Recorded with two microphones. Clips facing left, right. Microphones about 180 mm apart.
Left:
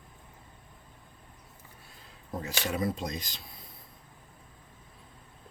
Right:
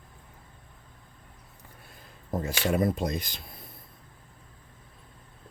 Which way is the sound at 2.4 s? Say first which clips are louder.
Right 5 dB; 55° right (ahead or behind).